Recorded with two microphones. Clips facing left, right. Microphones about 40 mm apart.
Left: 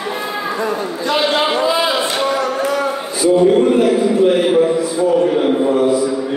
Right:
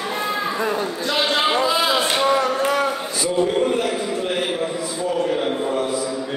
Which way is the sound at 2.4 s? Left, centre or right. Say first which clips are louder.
Left 2 dB; right.